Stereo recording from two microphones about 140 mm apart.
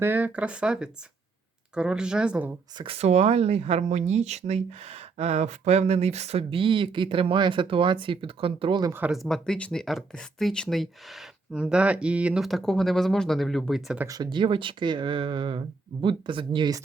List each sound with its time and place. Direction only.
0.0 s speech: 10° right (ahead or behind)
2.7 s speech: 40° right (ahead or behind)
8.9 s speech: 15° right (ahead or behind)
9.1 s speech: centre (ahead or behind)
14.1 s speech: 30° right (ahead or behind)